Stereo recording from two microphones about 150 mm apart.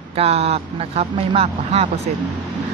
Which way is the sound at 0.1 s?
40° right (ahead or behind).